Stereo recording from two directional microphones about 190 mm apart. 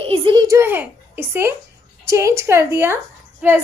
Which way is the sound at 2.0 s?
15° right (ahead or behind).